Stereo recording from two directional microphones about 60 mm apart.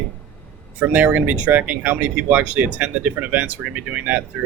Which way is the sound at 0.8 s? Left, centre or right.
Right.